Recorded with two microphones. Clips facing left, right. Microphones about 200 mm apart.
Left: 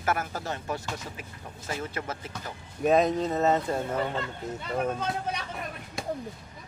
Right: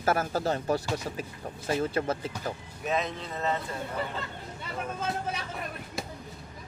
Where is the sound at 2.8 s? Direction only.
45° left (ahead or behind).